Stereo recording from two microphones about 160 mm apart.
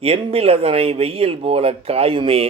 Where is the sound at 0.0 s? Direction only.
35° right (ahead or behind).